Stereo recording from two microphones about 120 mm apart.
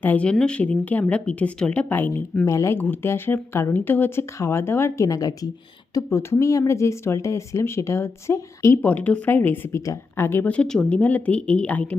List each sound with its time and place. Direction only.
0.0 s speech: 15° left (ahead or behind)